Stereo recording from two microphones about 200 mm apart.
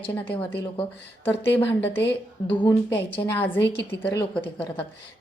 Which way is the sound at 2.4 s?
25° left (ahead or behind).